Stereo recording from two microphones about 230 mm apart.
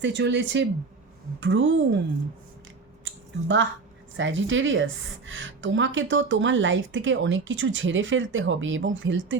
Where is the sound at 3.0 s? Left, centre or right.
Right.